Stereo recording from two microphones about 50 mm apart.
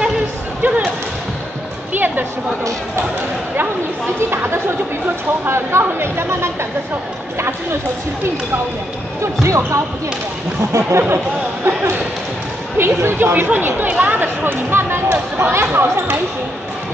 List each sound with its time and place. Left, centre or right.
0.6 s basketball bounce: right
2.0 s a sound: right
4.3 s chatter: right
5.5 s speech: right
9.2 s speech: right
10.7 s speech: right
12.7 s speech: right
13.8 s speech: right
14.2 s speech: right